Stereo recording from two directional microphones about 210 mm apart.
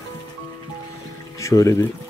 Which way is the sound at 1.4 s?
15° left (ahead or behind).